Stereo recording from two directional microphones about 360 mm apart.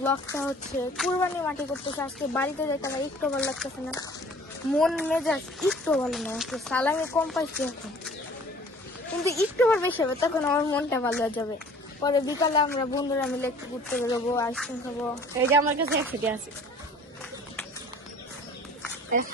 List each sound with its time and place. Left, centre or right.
0.0 s a woman's voice: centre
9.4 s a woman's voice: centre
15.4 s a woman's voice: centre